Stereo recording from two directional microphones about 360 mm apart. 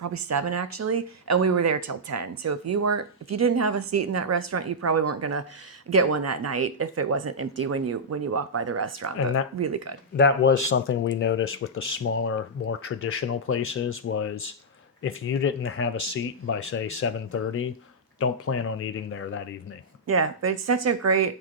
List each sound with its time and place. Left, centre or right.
0.0 s speech: right
10.2 s speech: left
20.1 s speech: right